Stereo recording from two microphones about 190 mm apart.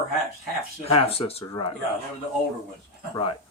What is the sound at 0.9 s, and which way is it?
Speech, 30° left (ahead or behind).